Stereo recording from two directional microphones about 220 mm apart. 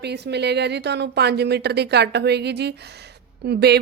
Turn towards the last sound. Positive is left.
turn(degrees=-50)  # may be behind; listen again after turning